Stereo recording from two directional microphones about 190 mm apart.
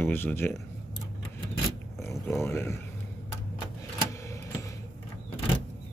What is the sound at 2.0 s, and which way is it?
Speech, 15° left (ahead or behind).